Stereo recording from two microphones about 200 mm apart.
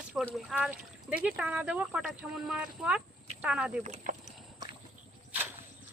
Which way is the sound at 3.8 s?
35° right (ahead or behind).